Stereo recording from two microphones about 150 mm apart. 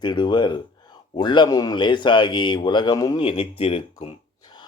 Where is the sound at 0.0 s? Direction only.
30° left (ahead or behind).